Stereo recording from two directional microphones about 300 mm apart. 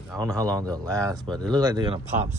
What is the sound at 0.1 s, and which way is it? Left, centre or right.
Speech, centre.